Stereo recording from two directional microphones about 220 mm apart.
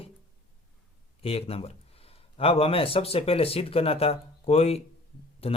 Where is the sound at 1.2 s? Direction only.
25° left (ahead or behind).